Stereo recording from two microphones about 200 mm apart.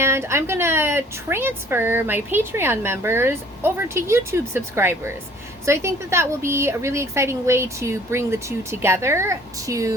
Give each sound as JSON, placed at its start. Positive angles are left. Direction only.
{"t": 0.0, "sound": "a woman's voice", "side_deg": -15}